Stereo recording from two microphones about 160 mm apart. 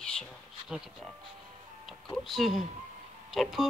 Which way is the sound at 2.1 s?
Centre (ahead or behind).